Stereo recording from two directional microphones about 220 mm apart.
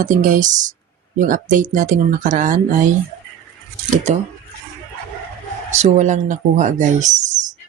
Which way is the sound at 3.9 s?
30° right (ahead or behind).